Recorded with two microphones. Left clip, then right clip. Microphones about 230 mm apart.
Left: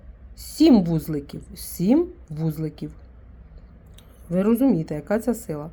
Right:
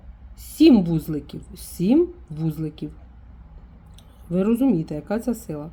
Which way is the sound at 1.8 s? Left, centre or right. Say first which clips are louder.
Even; left.